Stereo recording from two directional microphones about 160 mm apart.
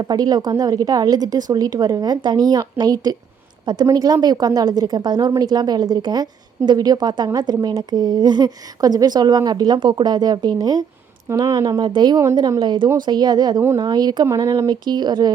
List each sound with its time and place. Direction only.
0.0 s a woman's voice: 25° right (ahead or behind)
13.6 s speech: 15° right (ahead or behind)
13.8 s a woman's voice: 25° right (ahead or behind)